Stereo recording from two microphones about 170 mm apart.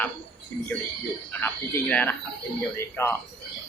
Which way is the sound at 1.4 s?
15° left (ahead or behind).